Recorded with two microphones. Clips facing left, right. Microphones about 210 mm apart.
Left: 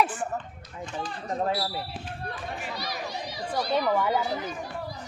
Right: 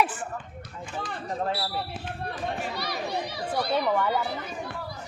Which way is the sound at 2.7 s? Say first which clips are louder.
Right 3 dB; 60° right (ahead or behind).